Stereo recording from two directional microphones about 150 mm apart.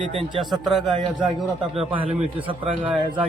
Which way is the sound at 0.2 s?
35° right (ahead or behind).